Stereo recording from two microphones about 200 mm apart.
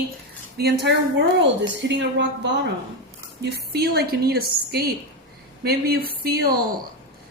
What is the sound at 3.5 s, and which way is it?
A woman's voice, 55° right (ahead or behind).